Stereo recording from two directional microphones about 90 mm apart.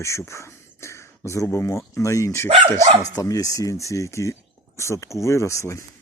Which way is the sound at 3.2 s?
40° left (ahead or behind).